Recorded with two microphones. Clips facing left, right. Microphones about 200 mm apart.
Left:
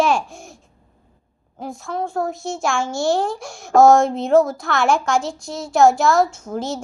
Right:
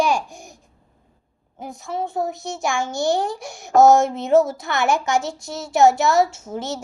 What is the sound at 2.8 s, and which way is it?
Speech, 20° right (ahead or behind).